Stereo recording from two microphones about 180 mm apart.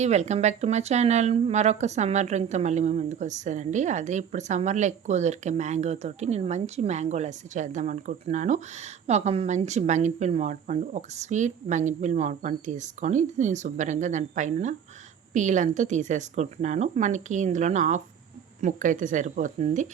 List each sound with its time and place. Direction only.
0.0 s a woman's voice: 40° right (ahead or behind)